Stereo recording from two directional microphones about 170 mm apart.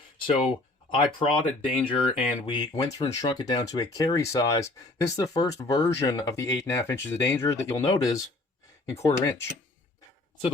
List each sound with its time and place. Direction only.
0.9 s speech: 30° left (ahead or behind)